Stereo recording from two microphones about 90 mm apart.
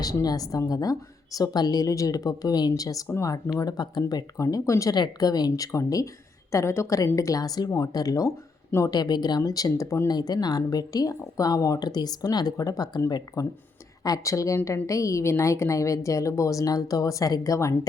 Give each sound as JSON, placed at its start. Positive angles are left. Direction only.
{"t": 0.0, "sound": "speech", "side_deg": 45}
{"t": 3.6, "sound": "speech", "side_deg": 50}
{"t": 4.4, "sound": "speech", "side_deg": 35}
{"t": 4.9, "sound": "speech", "side_deg": 50}
{"t": 8.9, "sound": "speech", "side_deg": 50}
{"t": 10.1, "sound": "speech", "side_deg": 50}